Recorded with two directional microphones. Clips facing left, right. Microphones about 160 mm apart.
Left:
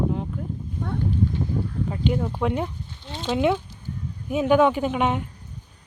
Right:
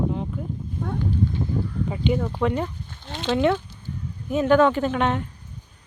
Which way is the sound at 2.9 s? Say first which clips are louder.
Right 1 dB; 65° right (ahead or behind).